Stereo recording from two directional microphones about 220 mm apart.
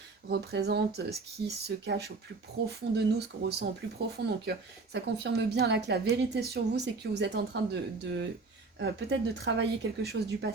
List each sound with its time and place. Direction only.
0.3 s a woman's voice: 50° right (ahead or behind)